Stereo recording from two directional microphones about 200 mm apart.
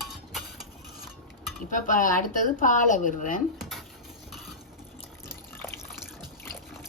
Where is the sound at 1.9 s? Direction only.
40° left (ahead or behind).